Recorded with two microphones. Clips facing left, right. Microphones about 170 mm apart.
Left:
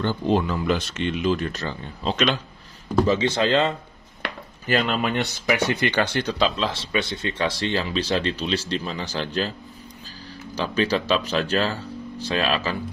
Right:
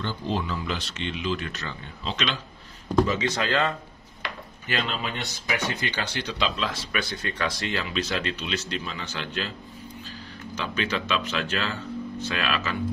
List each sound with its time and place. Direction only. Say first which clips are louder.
0.0 s speech: left 7 dB; 50° left (ahead or behind)
3.1 s speech: left 6 dB; 30° left (ahead or behind)
4.2 s a sound: left 4 dB; 65° left (ahead or behind)
4.6 s speech: left 7 dB; 50° left (ahead or behind)
10.5 s speech: left 6 dB; 35° left (ahead or behind)